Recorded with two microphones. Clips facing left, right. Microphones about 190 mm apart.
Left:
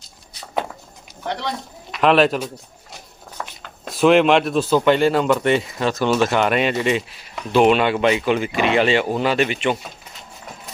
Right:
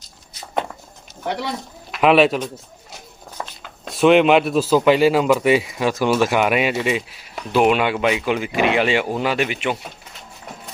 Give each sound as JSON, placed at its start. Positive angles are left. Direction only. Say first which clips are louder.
{"t": 1.9, "sound": "a man's voice", "louder": "right 1 dB", "side_deg": -5}
{"t": 3.4, "sound": "a sound", "louder": "right 1 dB", "side_deg": -20}
{"t": 3.8, "sound": "speech", "louder": "right 1 dB", "side_deg": 0}